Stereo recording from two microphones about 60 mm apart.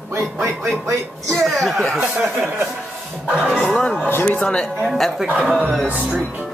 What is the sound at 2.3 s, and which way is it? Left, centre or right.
Speech, right.